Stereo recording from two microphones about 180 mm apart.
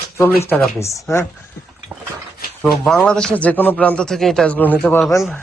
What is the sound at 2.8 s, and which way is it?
A man's voice, centre (ahead or behind).